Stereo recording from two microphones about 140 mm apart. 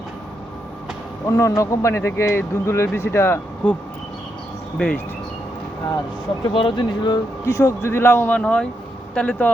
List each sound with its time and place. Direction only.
1.3 s speech: 20° left (ahead or behind)
4.8 s speech: 10° left (ahead or behind)
6.5 s speech: 35° left (ahead or behind)
7.4 s speech: 20° left (ahead or behind)